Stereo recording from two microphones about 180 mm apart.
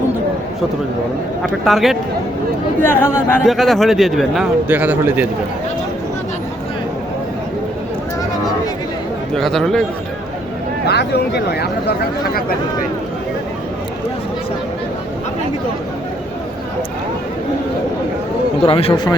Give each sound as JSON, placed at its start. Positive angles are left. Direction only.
{"t": 1.6, "sound": "speech", "side_deg": 0}
{"t": 2.8, "sound": "speech", "side_deg": 10}
{"t": 3.4, "sound": "speech", "side_deg": 0}
{"t": 9.3, "sound": "speech", "side_deg": 0}
{"t": 10.8, "sound": "speech", "side_deg": 65}
{"t": 18.6, "sound": "speech", "side_deg": 35}